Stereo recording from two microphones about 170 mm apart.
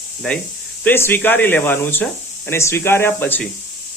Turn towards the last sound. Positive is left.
turn(degrees=10)  # may be behind; listen again after turning